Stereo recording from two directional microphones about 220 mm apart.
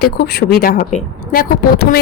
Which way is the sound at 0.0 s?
45° left (ahead or behind).